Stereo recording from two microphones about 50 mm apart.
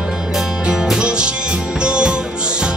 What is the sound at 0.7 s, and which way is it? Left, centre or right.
Music, centre.